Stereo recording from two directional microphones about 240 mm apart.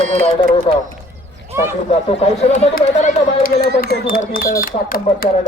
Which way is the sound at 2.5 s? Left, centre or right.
Left.